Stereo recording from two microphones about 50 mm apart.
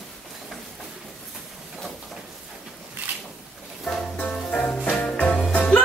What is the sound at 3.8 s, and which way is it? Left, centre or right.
Music, left.